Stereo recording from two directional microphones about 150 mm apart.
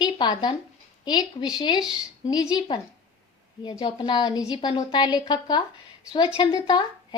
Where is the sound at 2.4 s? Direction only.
30° left (ahead or behind).